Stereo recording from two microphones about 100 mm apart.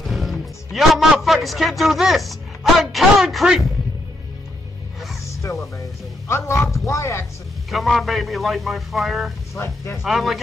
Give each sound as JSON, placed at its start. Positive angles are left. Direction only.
{"t": 0.0, "sound": "music", "side_deg": 0}
{"t": 5.2, "sound": "speech", "side_deg": 30}
{"t": 7.7, "sound": "a man's voice", "side_deg": 0}
{"t": 9.6, "sound": "speech", "side_deg": 30}
{"t": 10.0, "sound": "a man's voice", "side_deg": 0}